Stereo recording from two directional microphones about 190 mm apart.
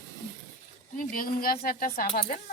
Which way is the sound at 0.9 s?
50° left (ahead or behind).